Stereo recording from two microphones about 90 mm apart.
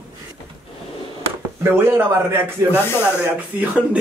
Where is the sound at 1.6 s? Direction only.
25° right (ahead or behind).